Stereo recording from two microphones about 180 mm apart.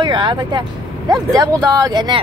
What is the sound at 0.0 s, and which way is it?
Speech, 25° right (ahead or behind).